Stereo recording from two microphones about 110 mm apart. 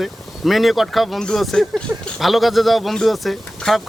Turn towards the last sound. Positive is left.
turn(degrees=0)  # may be behind; listen again after turning